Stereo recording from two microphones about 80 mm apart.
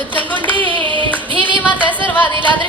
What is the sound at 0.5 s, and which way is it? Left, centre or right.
Singing, right.